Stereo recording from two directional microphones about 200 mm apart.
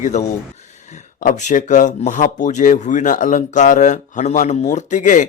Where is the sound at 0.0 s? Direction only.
35° left (ahead or behind).